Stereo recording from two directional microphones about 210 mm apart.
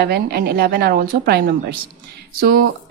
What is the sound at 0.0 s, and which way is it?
A woman's voice, 50° right (ahead or behind).